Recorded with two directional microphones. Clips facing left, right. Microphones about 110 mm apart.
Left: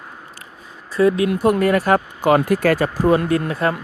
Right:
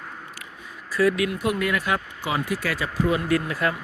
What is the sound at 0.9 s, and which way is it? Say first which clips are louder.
Speech: left 5 dB; 30° left (ahead or behind).